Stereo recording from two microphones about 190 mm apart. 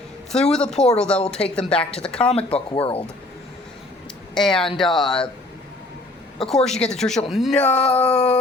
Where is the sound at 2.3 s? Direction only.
30° left (ahead or behind).